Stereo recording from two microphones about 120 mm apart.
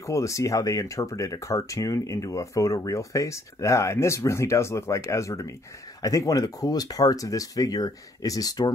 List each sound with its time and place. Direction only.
0.0 s speech: 25° left (ahead or behind)